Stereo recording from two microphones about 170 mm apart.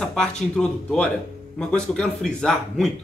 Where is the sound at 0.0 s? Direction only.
5° left (ahead or behind).